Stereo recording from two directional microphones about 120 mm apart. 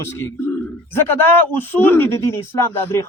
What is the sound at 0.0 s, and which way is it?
A man's voice, 20° left (ahead or behind).